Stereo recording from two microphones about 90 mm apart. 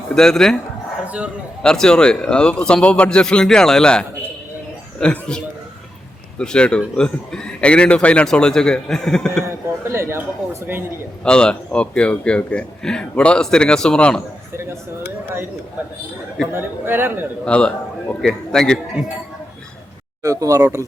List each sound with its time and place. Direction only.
0.1 s speech: 5° left (ahead or behind)
1.0 s a man's voice: 15° right (ahead or behind)
1.6 s a man's voice: 10° left (ahead or behind)
6.4 s a man's voice: 10° left (ahead or behind)
9.4 s a man's voice: 30° right (ahead or behind)
11.2 s a man's voice: 10° left (ahead or behind)
14.5 s a man's voice: 30° right (ahead or behind)
16.5 s a man's voice: 25° right (ahead or behind)
17.4 s a man's voice: 10° left (ahead or behind)
20.2 s speech: 40° right (ahead or behind)